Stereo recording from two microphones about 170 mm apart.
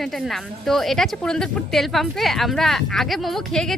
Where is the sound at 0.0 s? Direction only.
Centre (ahead or behind).